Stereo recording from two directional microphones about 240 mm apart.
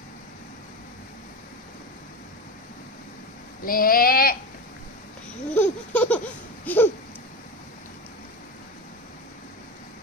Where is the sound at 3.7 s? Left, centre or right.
Left.